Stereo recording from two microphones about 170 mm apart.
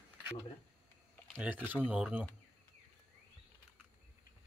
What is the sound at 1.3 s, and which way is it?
Speech, 10° right (ahead or behind).